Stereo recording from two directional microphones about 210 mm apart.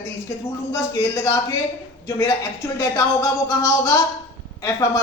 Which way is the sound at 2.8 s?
15° left (ahead or behind).